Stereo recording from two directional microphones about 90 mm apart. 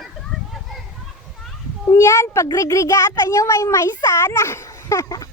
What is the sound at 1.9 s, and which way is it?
A child's voice, 35° left (ahead or behind).